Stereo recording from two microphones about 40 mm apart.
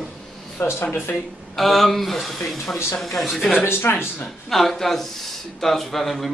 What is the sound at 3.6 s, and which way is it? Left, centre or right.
Speech, left.